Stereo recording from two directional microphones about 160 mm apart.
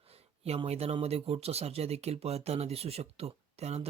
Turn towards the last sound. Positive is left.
turn(degrees=-40)  # may be behind; listen again after turning